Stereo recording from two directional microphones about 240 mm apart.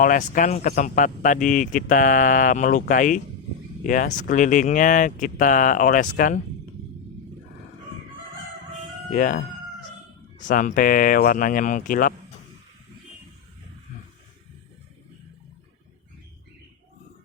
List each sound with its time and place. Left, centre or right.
0.0 s speech: left
9.1 s speech: left